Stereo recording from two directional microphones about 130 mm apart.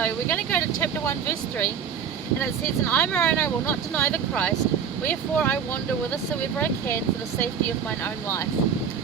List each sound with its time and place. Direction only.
0.0 s speech: 15° left (ahead or behind)